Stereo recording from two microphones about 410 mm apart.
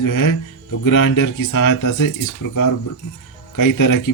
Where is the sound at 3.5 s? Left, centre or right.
Left.